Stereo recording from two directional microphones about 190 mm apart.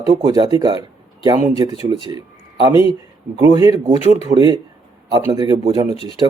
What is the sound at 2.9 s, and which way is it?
Speech, 20° right (ahead or behind).